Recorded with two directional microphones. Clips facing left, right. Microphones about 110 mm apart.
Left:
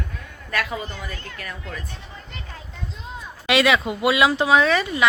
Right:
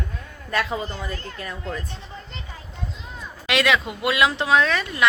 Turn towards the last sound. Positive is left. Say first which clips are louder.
# left 2 dB
turn(degrees=5)  # may be behind; listen again after turning